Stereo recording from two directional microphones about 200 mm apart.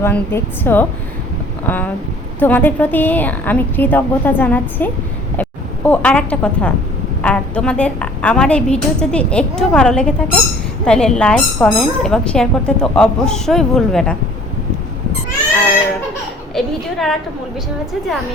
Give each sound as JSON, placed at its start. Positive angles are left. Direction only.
{"t": 0.0, "sound": "a woman's voice", "side_deg": 10}
{"t": 16.6, "sound": "speech", "side_deg": 0}